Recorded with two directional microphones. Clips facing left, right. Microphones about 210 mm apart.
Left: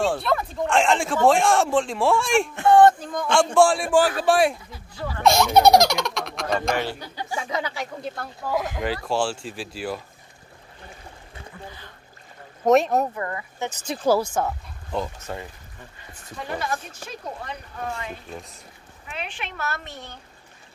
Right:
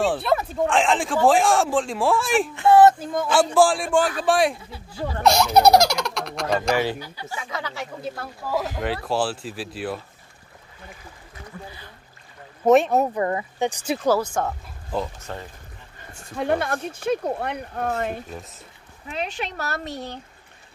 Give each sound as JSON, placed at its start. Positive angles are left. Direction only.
{"t": 0.0, "sound": "speech", "side_deg": 0}
{"t": 4.6, "sound": "speech", "side_deg": -25}
{"t": 5.2, "sound": "speech", "side_deg": 0}
{"t": 8.0, "sound": "speech", "side_deg": -5}
{"t": 12.6, "sound": "speech", "side_deg": 0}
{"t": 13.1, "sound": "speech", "side_deg": -25}
{"t": 13.6, "sound": "speech", "side_deg": -15}
{"t": 14.0, "sound": "speech", "side_deg": 10}
{"t": 16.1, "sound": "speech", "side_deg": -60}
{"t": 17.9, "sound": "speech", "side_deg": -50}
{"t": 19.0, "sound": "speech", "side_deg": -40}